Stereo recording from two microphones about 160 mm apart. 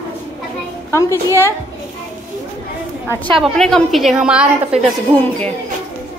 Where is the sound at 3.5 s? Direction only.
Centre (ahead or behind).